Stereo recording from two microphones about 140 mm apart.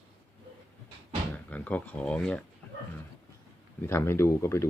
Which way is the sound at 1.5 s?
10° left (ahead or behind).